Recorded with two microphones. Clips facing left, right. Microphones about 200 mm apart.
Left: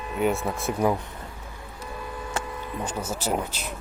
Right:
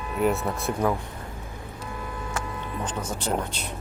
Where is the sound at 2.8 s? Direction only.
10° left (ahead or behind).